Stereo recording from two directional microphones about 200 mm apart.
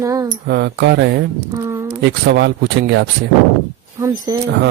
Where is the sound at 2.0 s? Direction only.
60° right (ahead or behind).